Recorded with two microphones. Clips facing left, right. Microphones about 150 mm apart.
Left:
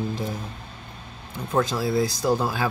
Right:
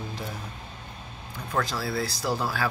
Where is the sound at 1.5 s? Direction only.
20° left (ahead or behind).